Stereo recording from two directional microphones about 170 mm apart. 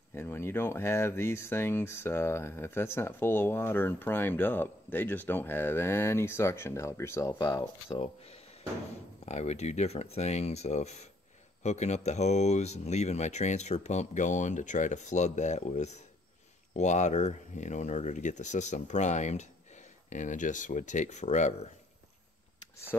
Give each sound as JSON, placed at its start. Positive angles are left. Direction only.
{"t": 0.1, "sound": "speech", "side_deg": 15}